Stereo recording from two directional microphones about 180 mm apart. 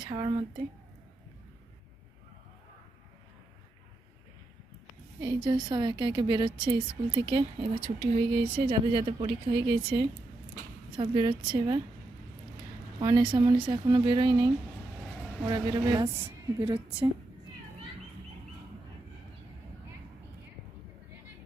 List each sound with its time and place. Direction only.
0.0 s a woman's voice: 25° right (ahead or behind)
5.2 s a woman's voice: 25° right (ahead or behind)
10.9 s a woman's voice: 25° right (ahead or behind)
13.0 s a woman's voice: 25° right (ahead or behind)